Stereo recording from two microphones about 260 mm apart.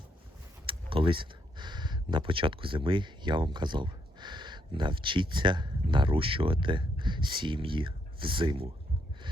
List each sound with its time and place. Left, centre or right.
0.7 s speech: right